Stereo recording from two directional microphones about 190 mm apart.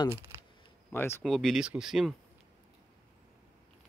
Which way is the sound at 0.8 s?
10° left (ahead or behind).